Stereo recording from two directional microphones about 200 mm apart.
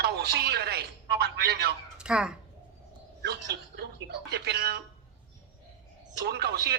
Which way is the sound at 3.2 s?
55° right (ahead or behind).